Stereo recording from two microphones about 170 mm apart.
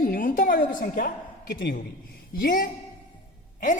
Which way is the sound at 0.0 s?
55° left (ahead or behind).